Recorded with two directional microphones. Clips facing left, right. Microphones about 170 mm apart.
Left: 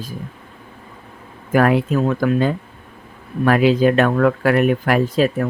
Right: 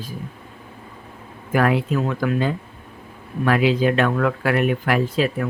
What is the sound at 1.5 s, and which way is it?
Speech, 45° left (ahead or behind).